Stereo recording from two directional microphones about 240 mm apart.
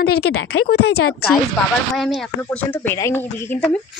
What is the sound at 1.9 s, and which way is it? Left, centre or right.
Speech, centre.